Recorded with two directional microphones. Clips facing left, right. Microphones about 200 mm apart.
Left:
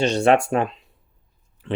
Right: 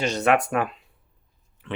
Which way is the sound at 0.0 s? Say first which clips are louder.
Left 4 dB; 30° left (ahead or behind).